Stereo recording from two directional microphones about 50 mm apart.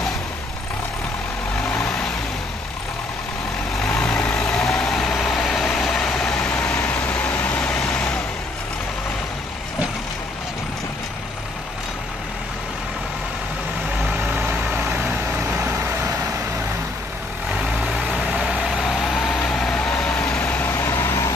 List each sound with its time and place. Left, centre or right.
1.7 s vehicle: left
3.8 s vehicle: centre
18.2 s vehicle: centre
18.5 s vehicle: centre
20.6 s vehicle: left